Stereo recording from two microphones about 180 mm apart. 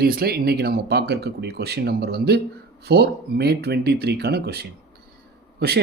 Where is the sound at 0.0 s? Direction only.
60° right (ahead or behind).